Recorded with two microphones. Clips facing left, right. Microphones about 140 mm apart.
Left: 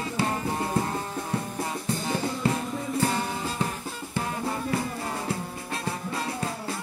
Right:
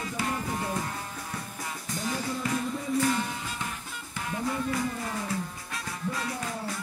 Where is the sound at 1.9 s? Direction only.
30° left (ahead or behind).